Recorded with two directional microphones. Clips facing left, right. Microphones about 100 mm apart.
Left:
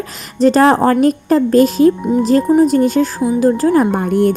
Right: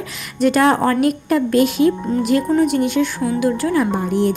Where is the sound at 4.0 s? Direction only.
50° left (ahead or behind).